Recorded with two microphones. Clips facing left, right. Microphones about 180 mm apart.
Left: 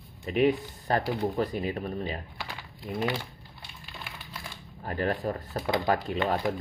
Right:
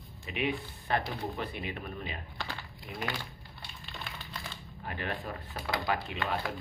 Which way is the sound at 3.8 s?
10° left (ahead or behind).